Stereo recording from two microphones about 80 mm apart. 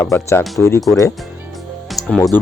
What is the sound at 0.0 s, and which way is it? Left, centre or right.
Speech, left.